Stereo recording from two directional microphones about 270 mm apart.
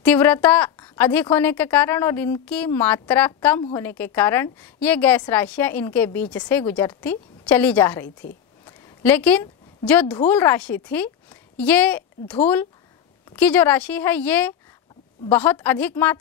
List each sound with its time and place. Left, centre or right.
0.0 s a woman's voice: centre
8.6 s a sound: centre
9.8 s a woman's voice: centre
13.4 s a woman's voice: centre